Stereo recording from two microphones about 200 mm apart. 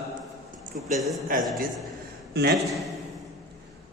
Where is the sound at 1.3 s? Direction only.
45° right (ahead or behind).